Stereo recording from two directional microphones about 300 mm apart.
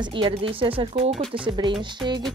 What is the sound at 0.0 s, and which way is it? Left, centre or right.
Speech, centre.